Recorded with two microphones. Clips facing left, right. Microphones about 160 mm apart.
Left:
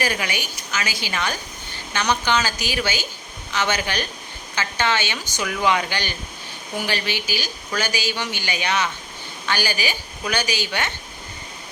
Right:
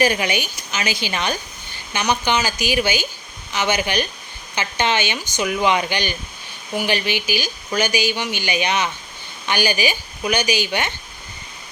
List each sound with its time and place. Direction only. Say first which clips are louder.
0.0 s speech: right 6 dB; 20° right (ahead or behind)